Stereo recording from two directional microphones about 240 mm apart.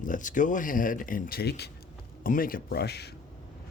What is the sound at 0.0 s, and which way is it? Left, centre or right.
Speech, left.